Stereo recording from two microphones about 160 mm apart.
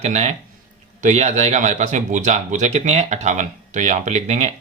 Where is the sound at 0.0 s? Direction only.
45° right (ahead or behind).